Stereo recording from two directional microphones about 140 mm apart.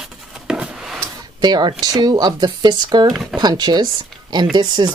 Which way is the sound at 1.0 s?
30° right (ahead or behind).